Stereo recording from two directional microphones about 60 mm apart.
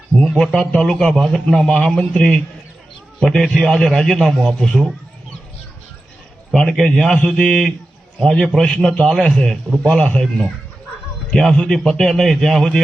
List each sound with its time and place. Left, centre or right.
0.2 s a man's voice: centre
6.5 s a man's voice: centre
10.0 s speech: centre
11.3 s a man's voice: centre